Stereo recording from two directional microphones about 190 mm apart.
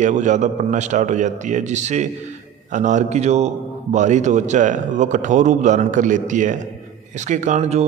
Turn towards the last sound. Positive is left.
turn(degrees=-35)  # may be behind; listen again after turning